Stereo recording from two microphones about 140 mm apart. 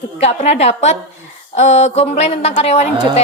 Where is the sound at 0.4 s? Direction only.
50° left (ahead or behind).